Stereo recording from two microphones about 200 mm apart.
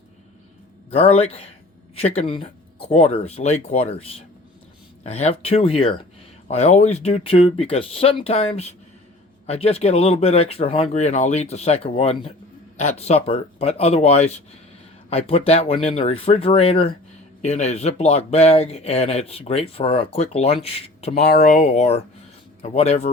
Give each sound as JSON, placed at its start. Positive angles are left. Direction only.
{"t": 0.9, "sound": "speech", "side_deg": 30}
{"t": 21.2, "sound": "speech", "side_deg": 45}